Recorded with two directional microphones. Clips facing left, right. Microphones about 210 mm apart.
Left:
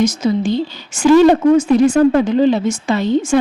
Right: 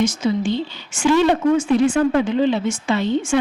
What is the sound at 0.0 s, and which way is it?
A woman's voice, 40° left (ahead or behind).